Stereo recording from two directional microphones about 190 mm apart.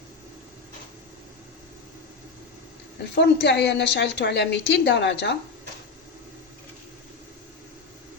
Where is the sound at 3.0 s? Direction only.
65° left (ahead or behind).